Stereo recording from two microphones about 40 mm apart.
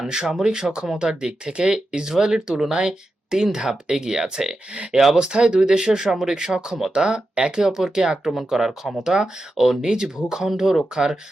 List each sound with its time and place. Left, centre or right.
0.1 s speech: centre